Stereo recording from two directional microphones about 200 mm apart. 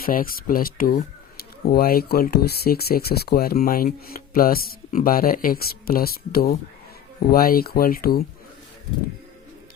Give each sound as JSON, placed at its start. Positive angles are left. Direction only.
{"t": 0.0, "sound": "speech", "side_deg": 45}